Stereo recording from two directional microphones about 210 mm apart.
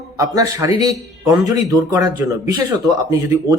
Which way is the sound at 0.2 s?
15° right (ahead or behind).